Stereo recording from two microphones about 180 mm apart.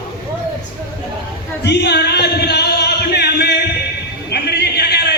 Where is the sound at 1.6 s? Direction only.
65° left (ahead or behind).